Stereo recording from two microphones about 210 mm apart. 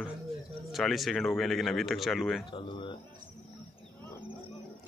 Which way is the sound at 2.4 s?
25° left (ahead or behind).